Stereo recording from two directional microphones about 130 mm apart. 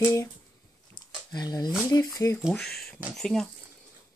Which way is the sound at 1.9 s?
25° left (ahead or behind).